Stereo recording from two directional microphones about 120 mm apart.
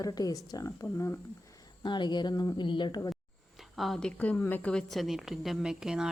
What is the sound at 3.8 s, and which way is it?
A woman's voice, 5° left (ahead or behind).